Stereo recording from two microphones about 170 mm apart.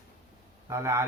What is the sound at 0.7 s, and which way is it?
Speech, 15° right (ahead or behind).